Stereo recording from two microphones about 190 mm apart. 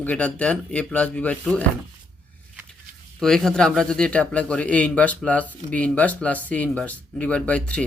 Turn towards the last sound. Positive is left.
turn(degrees=5)  # may be behind; listen again after turning